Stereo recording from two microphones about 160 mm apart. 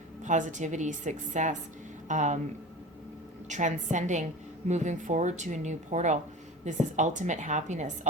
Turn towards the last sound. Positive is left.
turn(degrees=-50)  # may be behind; listen again after turning